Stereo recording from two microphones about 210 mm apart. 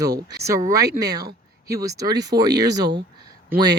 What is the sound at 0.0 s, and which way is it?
Speech, 20° right (ahead or behind).